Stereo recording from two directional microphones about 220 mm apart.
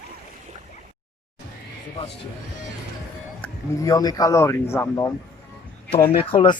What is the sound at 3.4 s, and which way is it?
Speech, 15° left (ahead or behind).